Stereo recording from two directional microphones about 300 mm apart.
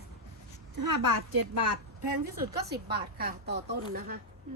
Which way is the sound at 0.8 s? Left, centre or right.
Right.